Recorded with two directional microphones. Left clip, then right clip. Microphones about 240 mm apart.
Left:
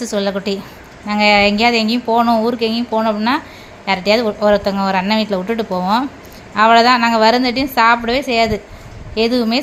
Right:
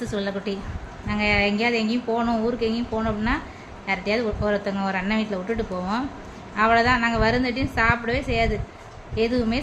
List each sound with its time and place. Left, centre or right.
0.0 s speech: centre